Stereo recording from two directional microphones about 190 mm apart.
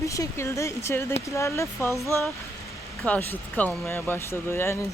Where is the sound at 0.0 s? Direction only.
15° left (ahead or behind).